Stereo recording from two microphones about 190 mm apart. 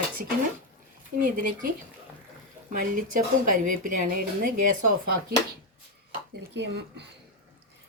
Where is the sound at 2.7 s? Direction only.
45° right (ahead or behind).